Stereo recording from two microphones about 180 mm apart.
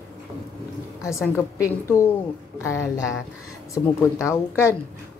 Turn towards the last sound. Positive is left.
turn(degrees=15)  # may be behind; listen again after turning